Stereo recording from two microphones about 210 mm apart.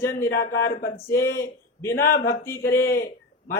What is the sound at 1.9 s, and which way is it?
Speech, 45° left (ahead or behind).